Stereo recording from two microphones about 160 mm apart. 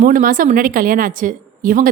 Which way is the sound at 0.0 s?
60° right (ahead or behind).